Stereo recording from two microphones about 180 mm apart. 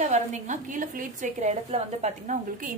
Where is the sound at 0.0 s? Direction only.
40° right (ahead or behind).